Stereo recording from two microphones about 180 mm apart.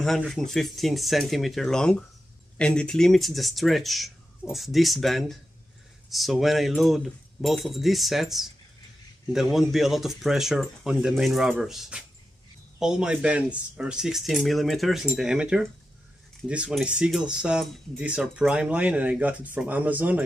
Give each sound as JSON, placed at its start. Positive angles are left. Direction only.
{"t": 0.0, "sound": "speech", "side_deg": 0}